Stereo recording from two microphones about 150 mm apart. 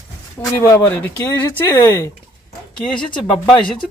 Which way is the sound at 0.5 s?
20° left (ahead or behind).